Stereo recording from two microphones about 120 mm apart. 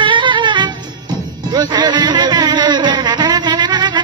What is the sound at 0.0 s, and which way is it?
Music, 40° right (ahead or behind).